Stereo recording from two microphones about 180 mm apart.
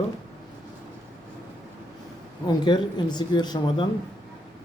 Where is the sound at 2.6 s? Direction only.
25° left (ahead or behind).